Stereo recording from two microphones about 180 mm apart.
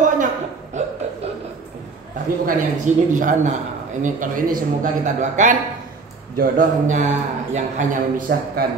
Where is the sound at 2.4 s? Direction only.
45° right (ahead or behind).